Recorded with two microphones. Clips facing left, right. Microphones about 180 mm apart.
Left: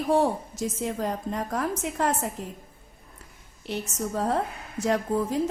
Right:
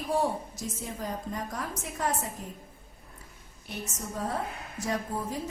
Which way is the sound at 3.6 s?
75° left (ahead or behind).